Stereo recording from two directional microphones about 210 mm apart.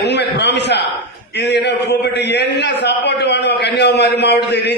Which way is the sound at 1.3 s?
55° left (ahead or behind).